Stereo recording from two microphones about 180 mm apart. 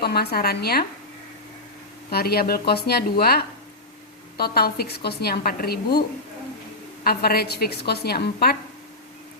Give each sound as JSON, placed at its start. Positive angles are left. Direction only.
{"t": 0.0, "sound": "a woman's voice", "side_deg": 60}
{"t": 2.0, "sound": "a woman's voice", "side_deg": 60}
{"t": 7.0, "sound": "a woman's voice", "side_deg": 60}